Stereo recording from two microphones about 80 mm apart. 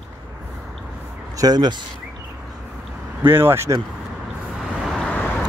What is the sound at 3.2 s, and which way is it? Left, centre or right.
Speech, right.